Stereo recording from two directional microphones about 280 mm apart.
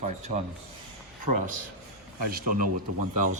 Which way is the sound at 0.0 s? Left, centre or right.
Right.